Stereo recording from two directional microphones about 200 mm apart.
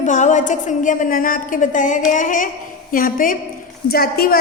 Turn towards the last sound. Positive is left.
turn(degrees=50)  # may be behind; listen again after turning